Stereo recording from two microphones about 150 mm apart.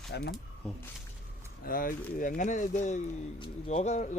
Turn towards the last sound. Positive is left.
turn(degrees=50)  # may be behind; listen again after turning